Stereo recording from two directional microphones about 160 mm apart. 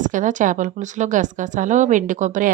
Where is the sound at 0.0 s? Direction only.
55° right (ahead or behind).